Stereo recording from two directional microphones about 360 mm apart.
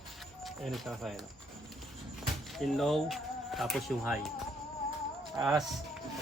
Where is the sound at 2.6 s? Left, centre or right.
Centre.